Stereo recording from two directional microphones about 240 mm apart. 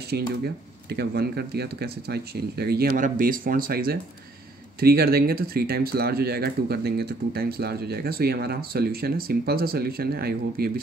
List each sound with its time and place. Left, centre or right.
0.1 s speech: right